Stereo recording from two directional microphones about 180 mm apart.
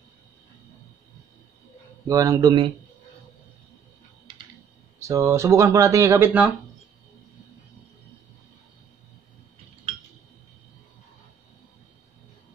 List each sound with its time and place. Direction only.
2.0 s speech: 20° right (ahead or behind)
4.9 s speech: 15° right (ahead or behind)